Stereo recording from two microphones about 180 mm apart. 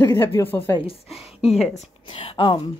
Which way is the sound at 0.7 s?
30° left (ahead or behind).